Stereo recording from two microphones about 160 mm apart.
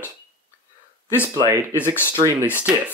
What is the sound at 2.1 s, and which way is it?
Speech, 20° right (ahead or behind).